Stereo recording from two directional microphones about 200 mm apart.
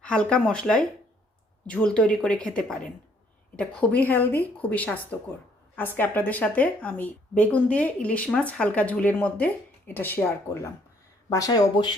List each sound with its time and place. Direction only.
0.0 s a woman's voice: 5° left (ahead or behind)